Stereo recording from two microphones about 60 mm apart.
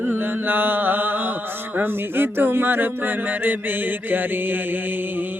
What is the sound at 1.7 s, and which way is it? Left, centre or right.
Mantra, right.